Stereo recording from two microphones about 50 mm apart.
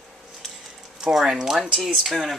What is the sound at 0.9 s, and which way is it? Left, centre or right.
Speech, centre.